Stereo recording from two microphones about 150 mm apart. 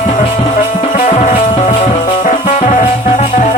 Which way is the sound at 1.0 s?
55° left (ahead or behind).